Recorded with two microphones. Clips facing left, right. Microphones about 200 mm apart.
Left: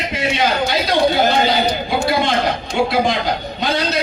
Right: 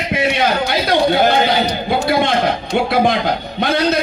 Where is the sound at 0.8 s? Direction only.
55° right (ahead or behind).